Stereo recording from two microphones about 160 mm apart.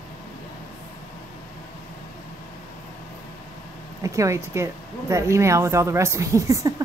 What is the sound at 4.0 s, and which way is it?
Speech, 20° right (ahead or behind).